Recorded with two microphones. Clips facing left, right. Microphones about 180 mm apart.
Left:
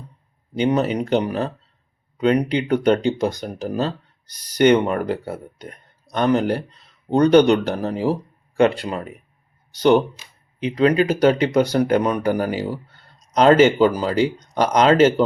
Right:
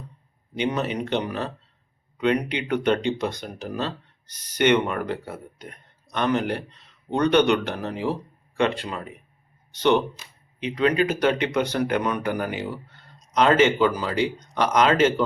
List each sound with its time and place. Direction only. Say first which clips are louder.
0.5 s speech: left 6 dB; 35° left (ahead or behind)